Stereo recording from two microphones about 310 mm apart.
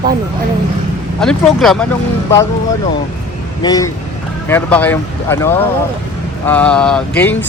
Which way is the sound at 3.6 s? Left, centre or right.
Centre.